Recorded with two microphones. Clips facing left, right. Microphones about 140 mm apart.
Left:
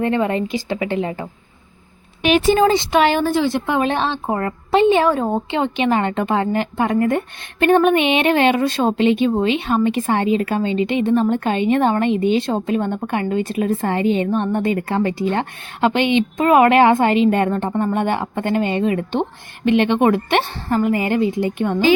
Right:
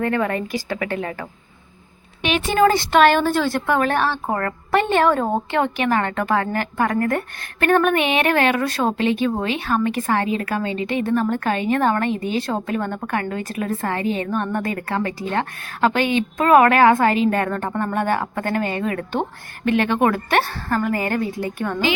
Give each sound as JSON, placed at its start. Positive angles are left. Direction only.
{"t": 0.0, "sound": "speech", "side_deg": 20}
{"t": 2.2, "sound": "speech", "side_deg": 40}
{"t": 2.6, "sound": "speech", "side_deg": 20}
{"t": 10.8, "sound": "a woman's voice", "side_deg": -40}
{"t": 11.0, "sound": "speech", "side_deg": 25}
{"t": 12.0, "sound": "a woman's voice", "side_deg": -40}
{"t": 12.4, "sound": "speech", "side_deg": 25}
{"t": 14.0, "sound": "a woman's voice", "side_deg": -35}
{"t": 14.3, "sound": "speech", "side_deg": 25}
{"t": 16.0, "sound": "a woman's voice", "side_deg": -40}
{"t": 16.4, "sound": "speech", "side_deg": 20}
{"t": 19.8, "sound": "speech", "side_deg": 25}